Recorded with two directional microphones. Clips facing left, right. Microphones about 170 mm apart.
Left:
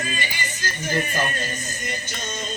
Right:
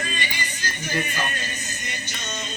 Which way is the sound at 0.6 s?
50° left (ahead or behind).